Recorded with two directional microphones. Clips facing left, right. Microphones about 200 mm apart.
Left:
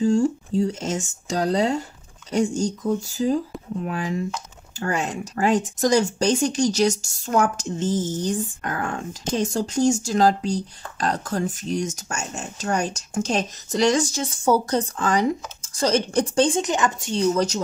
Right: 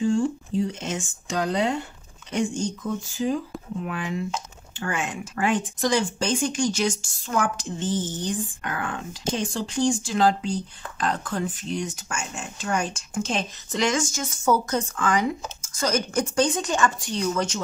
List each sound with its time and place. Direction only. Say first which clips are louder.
0.0 s speech: left 3 dB; 40° left (ahead or behind)